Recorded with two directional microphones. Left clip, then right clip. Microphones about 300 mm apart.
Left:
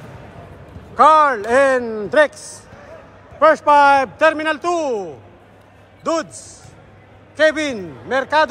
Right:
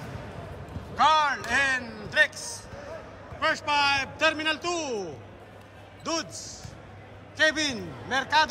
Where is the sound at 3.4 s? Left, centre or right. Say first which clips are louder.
Left 13 dB; centre.